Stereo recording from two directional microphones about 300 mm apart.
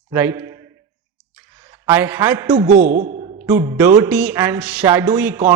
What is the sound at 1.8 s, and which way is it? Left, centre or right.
Speech, centre.